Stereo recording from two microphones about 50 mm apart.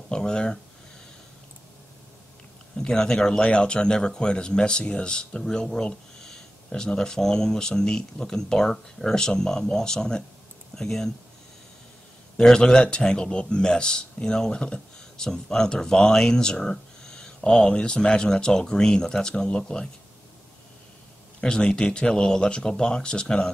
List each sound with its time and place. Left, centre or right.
0.1 s a sound: centre
2.8 s speech: centre
12.4 s speech: centre
21.4 s speech: centre